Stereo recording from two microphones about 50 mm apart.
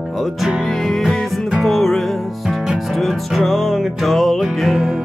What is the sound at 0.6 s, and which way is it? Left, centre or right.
Music, centre.